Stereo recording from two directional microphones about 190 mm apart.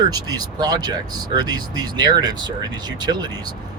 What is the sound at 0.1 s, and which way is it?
Speech, 20° right (ahead or behind).